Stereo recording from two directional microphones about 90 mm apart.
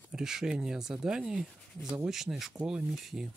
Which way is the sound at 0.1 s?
5° right (ahead or behind).